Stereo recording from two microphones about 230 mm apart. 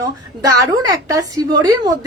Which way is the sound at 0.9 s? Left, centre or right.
Centre.